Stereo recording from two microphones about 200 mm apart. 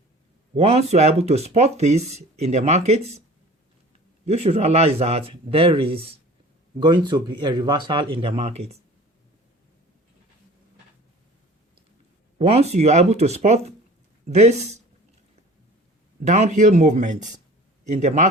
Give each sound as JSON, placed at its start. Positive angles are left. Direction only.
{"t": 0.5, "sound": "speech", "side_deg": -30}
{"t": 4.3, "sound": "speech", "side_deg": -30}
{"t": 12.4, "sound": "speech", "side_deg": -30}
{"t": 16.2, "sound": "speech", "side_deg": -35}